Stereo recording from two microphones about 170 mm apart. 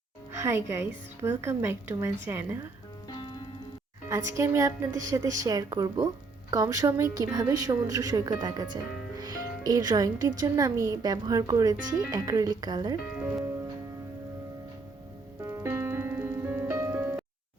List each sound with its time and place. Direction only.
0.4 s a woman's voice: 15° right (ahead or behind)
4.1 s a woman's voice: 15° right (ahead or behind)
13.1 s music: 10° right (ahead or behind)
15.4 s music: 15° right (ahead or behind)